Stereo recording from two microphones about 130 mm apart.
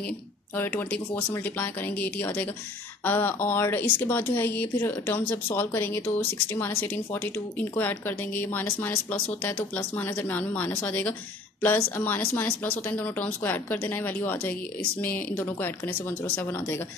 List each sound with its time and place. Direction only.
0.6 s speech: 15° left (ahead or behind)